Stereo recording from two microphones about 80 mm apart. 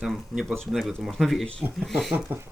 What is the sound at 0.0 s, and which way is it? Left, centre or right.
Speech, centre.